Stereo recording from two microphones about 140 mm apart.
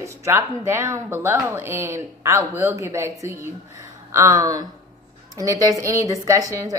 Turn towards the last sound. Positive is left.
turn(degrees=-25)  # may be behind; listen again after turning